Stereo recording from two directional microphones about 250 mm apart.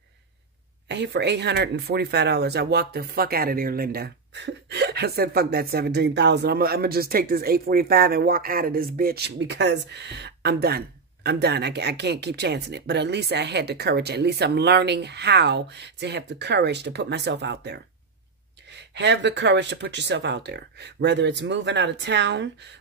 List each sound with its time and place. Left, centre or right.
0.8 s speech: right